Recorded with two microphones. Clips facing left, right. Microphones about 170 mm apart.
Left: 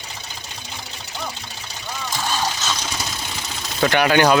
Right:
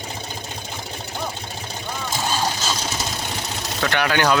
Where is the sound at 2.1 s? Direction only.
25° right (ahead or behind).